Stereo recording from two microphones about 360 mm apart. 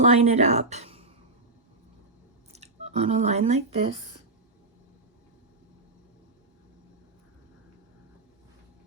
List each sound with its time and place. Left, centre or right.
0.0 s speech: centre
2.5 s speech: centre